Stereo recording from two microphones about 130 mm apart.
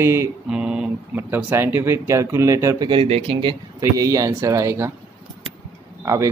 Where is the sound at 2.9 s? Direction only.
45° right (ahead or behind); by 4.9 s 25° right (ahead or behind).